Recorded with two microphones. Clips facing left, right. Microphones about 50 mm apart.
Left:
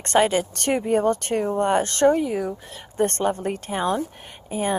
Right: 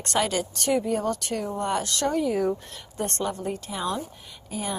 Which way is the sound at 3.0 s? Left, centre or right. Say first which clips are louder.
Left 7 dB; left.